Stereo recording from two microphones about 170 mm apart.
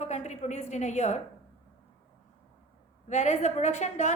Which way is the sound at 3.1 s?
45° left (ahead or behind).